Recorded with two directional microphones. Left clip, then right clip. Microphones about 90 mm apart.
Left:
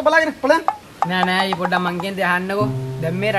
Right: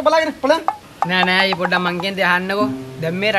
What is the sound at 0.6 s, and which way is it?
Speech, centre (ahead or behind).